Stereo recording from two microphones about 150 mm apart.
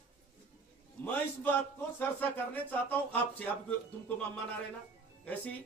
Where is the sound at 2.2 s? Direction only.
10° left (ahead or behind).